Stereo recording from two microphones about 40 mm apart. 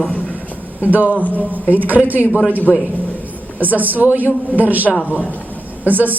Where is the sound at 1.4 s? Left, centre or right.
Right.